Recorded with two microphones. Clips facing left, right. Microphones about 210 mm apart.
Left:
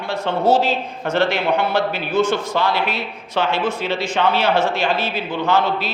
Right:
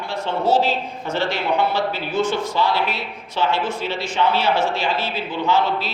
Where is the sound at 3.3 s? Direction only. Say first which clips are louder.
Left 2 dB; 60° left (ahead or behind).